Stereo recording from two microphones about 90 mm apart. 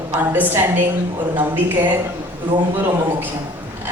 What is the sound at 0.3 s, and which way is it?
A woman's voice, 20° right (ahead or behind).